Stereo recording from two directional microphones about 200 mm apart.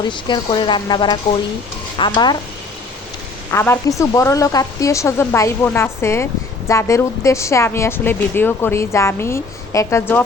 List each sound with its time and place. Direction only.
0.1 s speech: 25° left (ahead or behind)
3.5 s a woman's voice: 15° left (ahead or behind)